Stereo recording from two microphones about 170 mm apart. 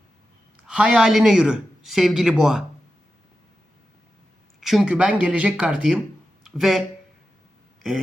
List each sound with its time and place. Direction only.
0.7 s speech: 5° right (ahead or behind)
4.6 s speech: centre (ahead or behind)
6.4 s a sound: centre (ahead or behind)